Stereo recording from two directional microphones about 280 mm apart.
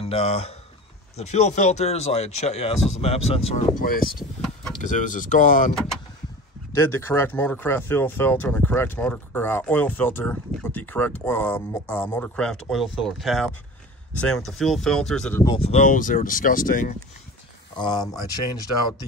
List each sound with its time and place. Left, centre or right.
0.0 s speech: left
6.8 s speech: centre
15.4 s speech: centre
17.7 s speech: centre